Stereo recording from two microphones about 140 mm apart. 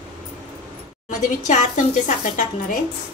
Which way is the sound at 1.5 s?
60° left (ahead or behind).